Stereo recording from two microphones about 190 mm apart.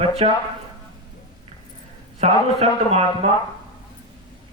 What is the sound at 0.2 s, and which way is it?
Speech, 30° right (ahead or behind).